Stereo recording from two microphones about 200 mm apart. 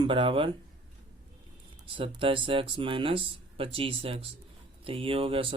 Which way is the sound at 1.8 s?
25° right (ahead or behind).